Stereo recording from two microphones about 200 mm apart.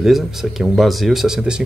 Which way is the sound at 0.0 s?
Centre (ahead or behind).